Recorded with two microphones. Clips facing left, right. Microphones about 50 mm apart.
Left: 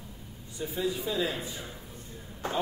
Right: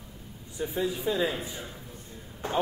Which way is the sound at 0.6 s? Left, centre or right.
Right.